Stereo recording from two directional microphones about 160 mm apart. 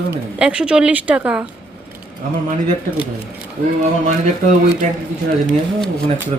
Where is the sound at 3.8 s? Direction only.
45° right (ahead or behind).